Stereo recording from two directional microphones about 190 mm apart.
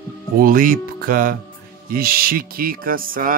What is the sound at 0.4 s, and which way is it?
Music, 45° right (ahead or behind).